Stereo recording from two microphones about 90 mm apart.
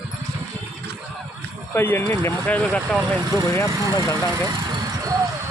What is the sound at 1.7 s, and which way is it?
Speech, 25° left (ahead or behind).